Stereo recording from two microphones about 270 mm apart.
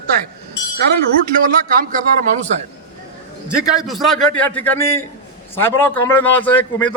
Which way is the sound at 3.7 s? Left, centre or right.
Centre.